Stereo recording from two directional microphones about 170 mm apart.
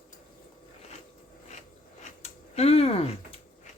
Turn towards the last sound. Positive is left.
turn(degrees=35)  # may be behind; listen again after turning